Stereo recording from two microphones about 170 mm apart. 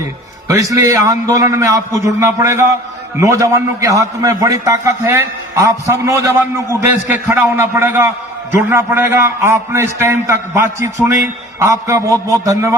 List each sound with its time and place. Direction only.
0.4 s a man's voice: 20° right (ahead or behind)